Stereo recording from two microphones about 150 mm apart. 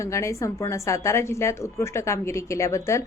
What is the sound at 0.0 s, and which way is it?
A woman's voice, 20° left (ahead or behind).